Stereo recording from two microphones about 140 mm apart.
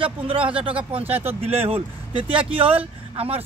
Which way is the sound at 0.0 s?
40° right (ahead or behind).